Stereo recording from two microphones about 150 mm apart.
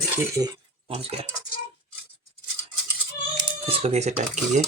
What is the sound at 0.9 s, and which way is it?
Speech, 40° right (ahead or behind).